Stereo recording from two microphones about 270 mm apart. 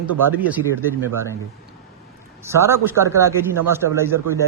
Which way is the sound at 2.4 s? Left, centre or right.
Centre.